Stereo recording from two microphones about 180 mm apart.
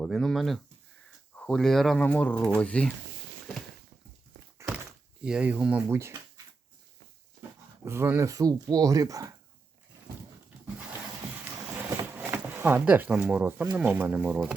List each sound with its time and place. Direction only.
0.0 s speech: centre (ahead or behind)
4.6 s thunk: 15° right (ahead or behind)
5.2 s speech: 5° right (ahead or behind)
7.9 s speech: 15° right (ahead or behind)
12.1 s speech: 10° right (ahead or behind)